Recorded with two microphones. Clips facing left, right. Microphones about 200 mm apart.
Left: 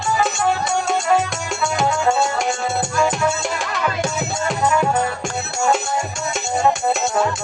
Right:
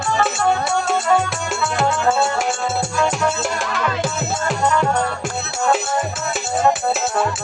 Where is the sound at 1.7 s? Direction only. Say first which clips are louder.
Even; centre (ahead or behind).